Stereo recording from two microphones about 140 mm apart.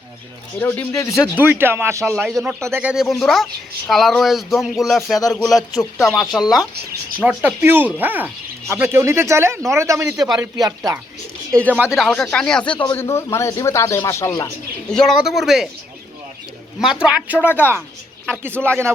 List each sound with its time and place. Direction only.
0.6 s speech: 15° left (ahead or behind)
1.2 s speech: 15° right (ahead or behind)
2.1 s speech: 5° right (ahead or behind)
2.8 s speech: 5° right (ahead or behind)
7.2 s speech: 10° right (ahead or behind)
10.2 s speech: 5° right (ahead or behind)
10.4 s speech: 20° right (ahead or behind)
11.7 s speech: 10° right (ahead or behind)
11.9 s speech: centre (ahead or behind); by 14.4 s 20° left (ahead or behind)
14.8 s speech: 5° left (ahead or behind)
16.8 s speech: 5° right (ahead or behind)